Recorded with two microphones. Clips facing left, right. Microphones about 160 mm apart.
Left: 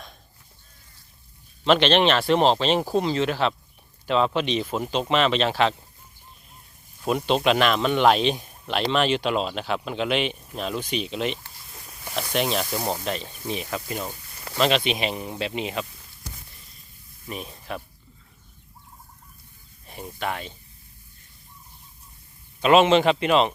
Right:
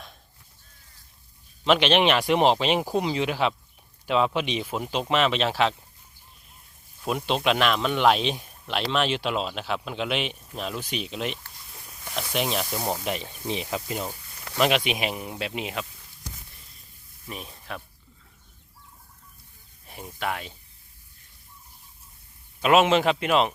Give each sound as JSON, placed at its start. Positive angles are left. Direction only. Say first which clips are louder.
{"t": 1.6, "sound": "speech", "louder": "left 2 dB", "side_deg": -5}
{"t": 7.0, "sound": "speech", "louder": "left 3 dB", "side_deg": 0}
{"t": 13.1, "sound": "speech", "louder": "even", "side_deg": -15}
{"t": 17.2, "sound": "speech", "louder": "left 4 dB", "side_deg": 0}
{"t": 19.9, "sound": "speech", "louder": "left 1 dB", "side_deg": 0}
{"t": 22.6, "sound": "speech", "louder": "left 3 dB", "side_deg": -5}